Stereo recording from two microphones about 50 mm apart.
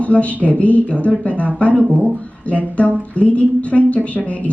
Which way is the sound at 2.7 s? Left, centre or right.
Left.